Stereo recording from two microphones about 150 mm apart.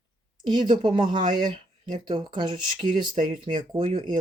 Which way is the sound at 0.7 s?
35° right (ahead or behind).